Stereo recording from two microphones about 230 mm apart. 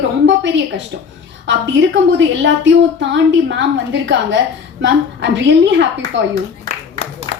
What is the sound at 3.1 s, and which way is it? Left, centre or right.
A woman's voice, right.